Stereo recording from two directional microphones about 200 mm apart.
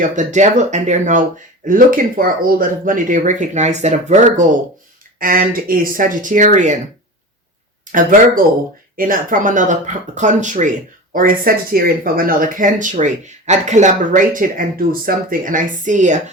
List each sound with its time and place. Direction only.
0.0 s speech: 40° right (ahead or behind)
7.9 s speech: 40° right (ahead or behind)